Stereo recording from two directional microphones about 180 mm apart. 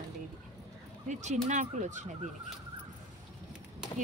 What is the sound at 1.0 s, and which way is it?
Speech, 40° right (ahead or behind).